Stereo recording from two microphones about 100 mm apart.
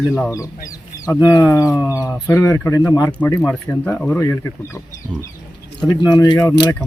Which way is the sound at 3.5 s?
15° left (ahead or behind).